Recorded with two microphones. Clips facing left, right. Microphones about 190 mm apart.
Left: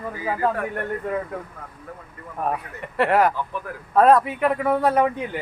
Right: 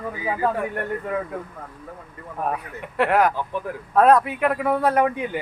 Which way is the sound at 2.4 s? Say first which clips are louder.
Left 1 dB; centre (ahead or behind).